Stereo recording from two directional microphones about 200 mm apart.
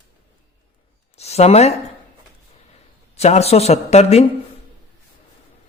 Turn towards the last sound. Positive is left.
turn(degrees=30)  # may be behind; listen again after turning